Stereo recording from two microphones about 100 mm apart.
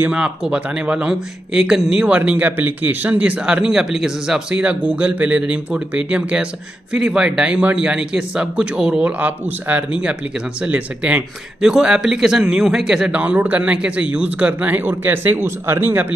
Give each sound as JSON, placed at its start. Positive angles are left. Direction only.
{"t": 0.0, "sound": "speech", "side_deg": -10}